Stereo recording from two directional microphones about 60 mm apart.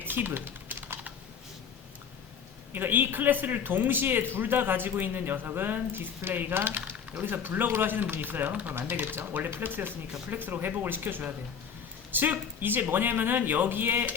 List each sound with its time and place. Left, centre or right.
0.0 s typing: right
2.7 s a man's voice: right